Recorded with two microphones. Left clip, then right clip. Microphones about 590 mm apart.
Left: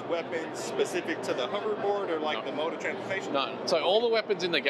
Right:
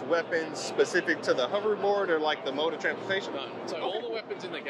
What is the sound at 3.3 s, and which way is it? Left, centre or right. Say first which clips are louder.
Speech: left 7 dB; left.